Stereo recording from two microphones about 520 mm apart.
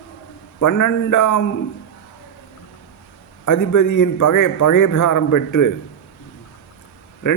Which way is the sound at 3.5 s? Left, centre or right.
Left.